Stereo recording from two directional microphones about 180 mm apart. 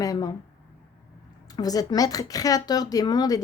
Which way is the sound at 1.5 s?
20° left (ahead or behind).